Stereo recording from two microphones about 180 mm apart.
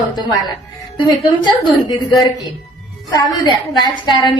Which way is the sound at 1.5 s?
25° left (ahead or behind).